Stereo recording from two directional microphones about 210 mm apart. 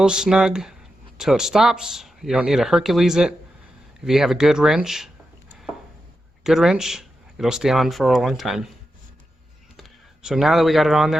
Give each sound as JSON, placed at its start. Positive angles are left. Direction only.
{"t": 0.0, "sound": "speech", "side_deg": -5}
{"t": 9.7, "sound": "speech", "side_deg": 0}